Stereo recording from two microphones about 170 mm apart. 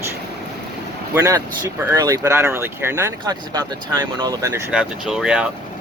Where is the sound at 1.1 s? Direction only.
20° right (ahead or behind).